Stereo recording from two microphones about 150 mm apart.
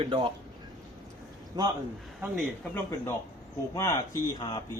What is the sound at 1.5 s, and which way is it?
Speech, 25° right (ahead or behind).